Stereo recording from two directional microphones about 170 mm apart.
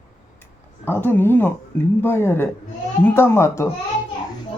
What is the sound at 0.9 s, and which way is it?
Speech, 10° left (ahead or behind).